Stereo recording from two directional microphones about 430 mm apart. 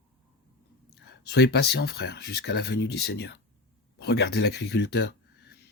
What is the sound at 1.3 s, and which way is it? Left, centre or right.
Speech, left.